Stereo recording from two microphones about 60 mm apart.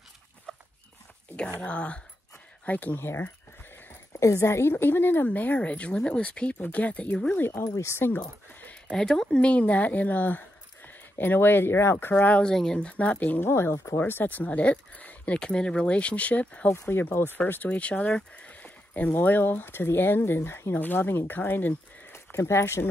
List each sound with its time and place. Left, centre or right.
0.5 s dog: centre
1.6 s speech: centre
2.6 s a sound: left
4.1 s speech: left
7.6 s speech: left
7.9 s speech: left
8.9 s speech: centre; by 12.1 s left
12.1 s speech: left
12.4 s speech: centre
13.4 s speech: left
13.9 s speech: left
16.9 s speech: left
20.7 s speech: left
22.1 s speech: left